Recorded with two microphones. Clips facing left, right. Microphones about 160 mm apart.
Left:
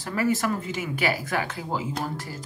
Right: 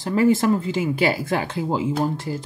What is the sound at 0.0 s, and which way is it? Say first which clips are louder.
Speech: right 7 dB; 25° right (ahead or behind).